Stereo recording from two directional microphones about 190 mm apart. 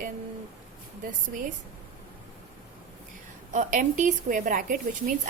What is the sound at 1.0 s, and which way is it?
Speech, 45° right (ahead or behind).